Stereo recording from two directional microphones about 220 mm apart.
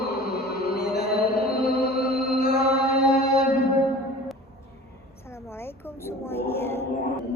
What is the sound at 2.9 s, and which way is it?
Mantra, 45° left (ahead or behind).